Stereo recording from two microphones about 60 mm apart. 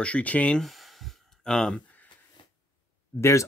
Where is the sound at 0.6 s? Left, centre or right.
Centre.